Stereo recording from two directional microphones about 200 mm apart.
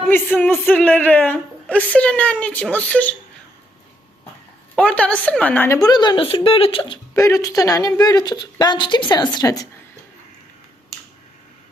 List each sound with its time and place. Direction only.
0.1 s speech: 10° left (ahead or behind)
4.8 s a woman's voice: 5° left (ahead or behind)